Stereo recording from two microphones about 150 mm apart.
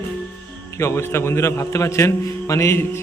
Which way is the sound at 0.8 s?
15° left (ahead or behind).